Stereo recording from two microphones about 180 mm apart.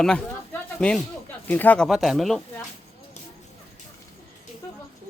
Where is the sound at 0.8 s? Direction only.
5° left (ahead or behind).